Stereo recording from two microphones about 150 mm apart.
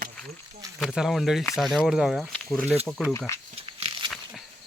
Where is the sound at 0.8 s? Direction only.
5° right (ahead or behind).